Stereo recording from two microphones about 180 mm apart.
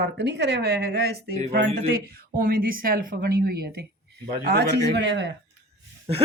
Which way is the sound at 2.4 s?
55° right (ahead or behind).